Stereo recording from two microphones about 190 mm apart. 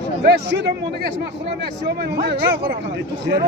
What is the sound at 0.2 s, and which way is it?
Speech, 65° right (ahead or behind).